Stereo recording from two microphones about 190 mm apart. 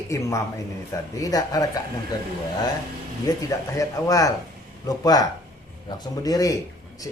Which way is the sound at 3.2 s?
15° left (ahead or behind).